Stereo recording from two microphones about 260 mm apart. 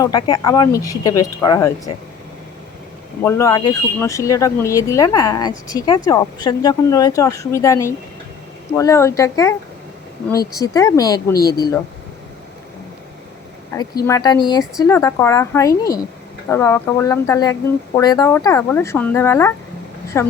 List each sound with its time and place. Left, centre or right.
0.0 s speech: centre
3.2 s speech: centre
10.6 s speech: centre
14.1 s speech: centre